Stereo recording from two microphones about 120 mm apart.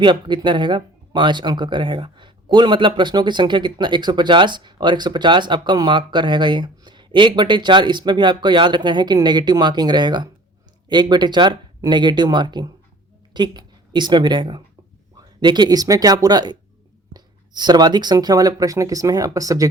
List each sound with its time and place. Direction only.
0.0 s speech: 40° right (ahead or behind)